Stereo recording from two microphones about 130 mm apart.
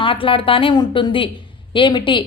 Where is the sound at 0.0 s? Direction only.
40° left (ahead or behind).